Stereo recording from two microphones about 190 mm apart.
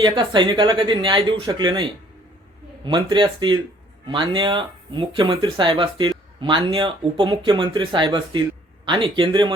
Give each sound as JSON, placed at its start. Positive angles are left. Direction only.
{"t": 0.0, "sound": "speech", "side_deg": -25}